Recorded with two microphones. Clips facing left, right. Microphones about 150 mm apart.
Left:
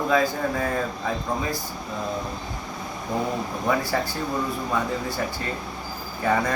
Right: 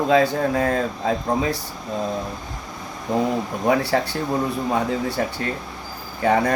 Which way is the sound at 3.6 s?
70° right (ahead or behind).